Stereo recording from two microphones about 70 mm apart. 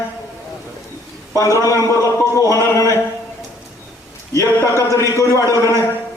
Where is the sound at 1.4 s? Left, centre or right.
Left.